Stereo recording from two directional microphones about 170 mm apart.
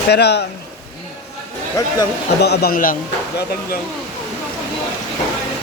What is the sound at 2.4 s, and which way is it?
Speech, 70° left (ahead or behind).